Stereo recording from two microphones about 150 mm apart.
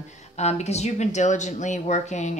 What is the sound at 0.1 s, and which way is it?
Speech, 50° left (ahead or behind).